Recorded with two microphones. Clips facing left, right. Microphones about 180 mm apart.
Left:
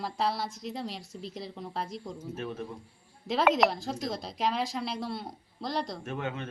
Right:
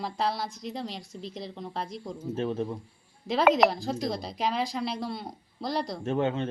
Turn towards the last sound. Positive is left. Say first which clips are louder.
# right 8 dB
turn(degrees=-30)  # may be behind; listen again after turning